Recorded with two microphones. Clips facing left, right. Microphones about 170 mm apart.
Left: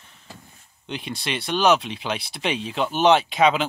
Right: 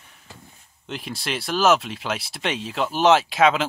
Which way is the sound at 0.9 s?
Centre (ahead or behind).